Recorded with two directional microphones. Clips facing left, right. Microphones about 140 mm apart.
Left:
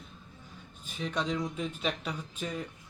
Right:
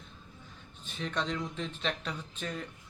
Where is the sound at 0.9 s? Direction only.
5° left (ahead or behind).